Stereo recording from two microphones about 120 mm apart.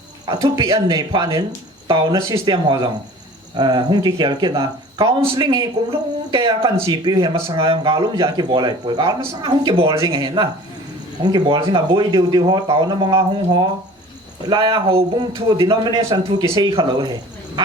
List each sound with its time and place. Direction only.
0.3 s speech: 40° right (ahead or behind)
6.8 s speech: 35° right (ahead or behind)
15.2 s speech: 35° right (ahead or behind)